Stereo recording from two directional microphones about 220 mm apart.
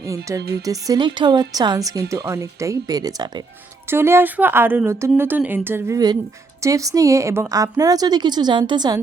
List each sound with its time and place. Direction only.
0.3 s a woman's voice: 15° right (ahead or behind)